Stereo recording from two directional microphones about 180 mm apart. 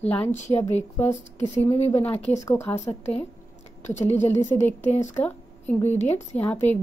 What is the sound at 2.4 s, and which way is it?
Speech, 15° left (ahead or behind).